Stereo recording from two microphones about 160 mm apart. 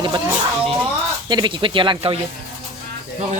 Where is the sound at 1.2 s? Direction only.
25° right (ahead or behind).